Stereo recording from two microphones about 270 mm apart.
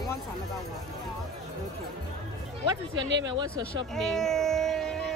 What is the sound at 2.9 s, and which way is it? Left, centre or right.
Speech, right.